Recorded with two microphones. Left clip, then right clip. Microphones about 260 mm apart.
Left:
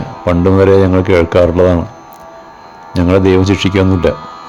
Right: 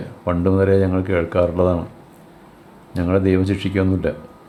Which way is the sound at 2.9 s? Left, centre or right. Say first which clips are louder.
Left 8 dB; left.